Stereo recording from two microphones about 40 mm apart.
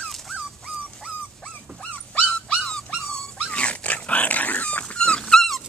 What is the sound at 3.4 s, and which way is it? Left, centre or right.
Dog, left.